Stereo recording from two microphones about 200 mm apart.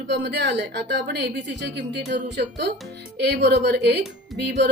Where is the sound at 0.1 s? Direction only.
60° right (ahead or behind).